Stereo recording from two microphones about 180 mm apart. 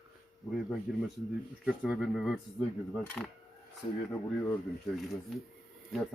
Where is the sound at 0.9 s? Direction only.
5° right (ahead or behind).